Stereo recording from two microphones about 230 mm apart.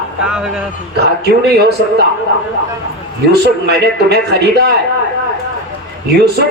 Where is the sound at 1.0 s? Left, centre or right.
Right.